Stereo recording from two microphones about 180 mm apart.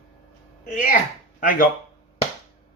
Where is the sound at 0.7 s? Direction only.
45° left (ahead or behind).